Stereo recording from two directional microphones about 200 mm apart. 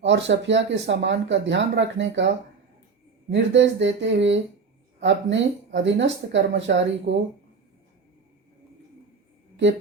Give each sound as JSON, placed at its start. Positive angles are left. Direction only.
{"t": 0.0, "sound": "speech", "side_deg": -65}